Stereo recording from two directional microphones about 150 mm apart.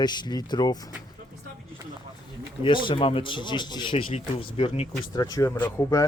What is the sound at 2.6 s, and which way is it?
Speech, 35° left (ahead or behind).